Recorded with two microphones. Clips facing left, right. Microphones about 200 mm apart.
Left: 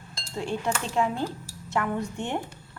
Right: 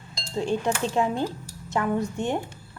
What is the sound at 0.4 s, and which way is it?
Speech, 20° right (ahead or behind).